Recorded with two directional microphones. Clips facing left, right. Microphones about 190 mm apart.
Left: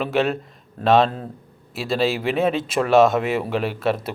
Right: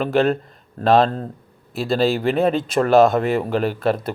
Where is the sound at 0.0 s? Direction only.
5° left (ahead or behind).